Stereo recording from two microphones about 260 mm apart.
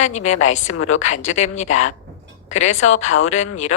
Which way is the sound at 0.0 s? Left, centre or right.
Left.